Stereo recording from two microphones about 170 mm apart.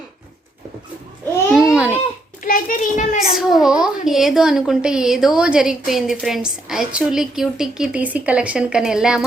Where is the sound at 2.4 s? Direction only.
55° left (ahead or behind).